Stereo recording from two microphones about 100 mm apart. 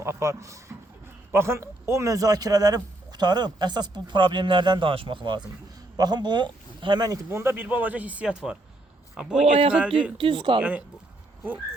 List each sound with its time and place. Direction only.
0.0 s a man's voice: 30° right (ahead or behind)
7.3 s speech: 25° right (ahead or behind)
9.4 s speech: 75° right (ahead or behind)
10.2 s speech: 55° right (ahead or behind)
10.6 s speech: 15° right (ahead or behind)